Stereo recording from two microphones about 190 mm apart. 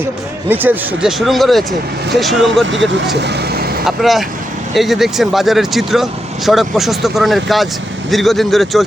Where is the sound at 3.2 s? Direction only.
60° right (ahead or behind).